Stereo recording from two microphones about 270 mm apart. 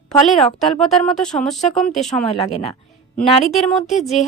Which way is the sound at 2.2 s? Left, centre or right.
Left.